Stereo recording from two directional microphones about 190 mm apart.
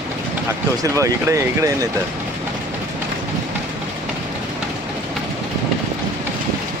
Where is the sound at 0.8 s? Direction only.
15° right (ahead or behind).